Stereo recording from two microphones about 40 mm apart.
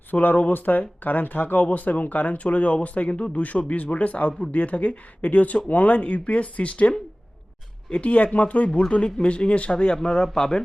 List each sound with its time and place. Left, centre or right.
0.1 s speech: left
8.9 s a man's voice: left